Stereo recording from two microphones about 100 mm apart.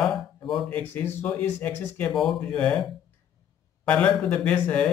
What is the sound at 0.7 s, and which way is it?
Speech, 15° left (ahead or behind).